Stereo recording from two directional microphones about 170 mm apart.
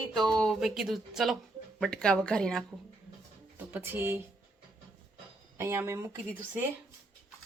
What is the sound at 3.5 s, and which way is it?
Speech, 10° right (ahead or behind).